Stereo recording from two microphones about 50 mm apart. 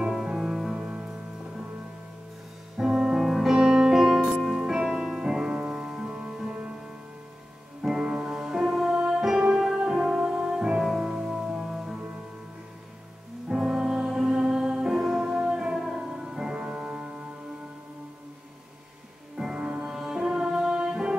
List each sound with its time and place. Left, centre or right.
0.0 s music: centre
0.7 s music: centre
2.9 s music: centre
7.8 s music: centre
13.5 s music: centre
19.3 s music: centre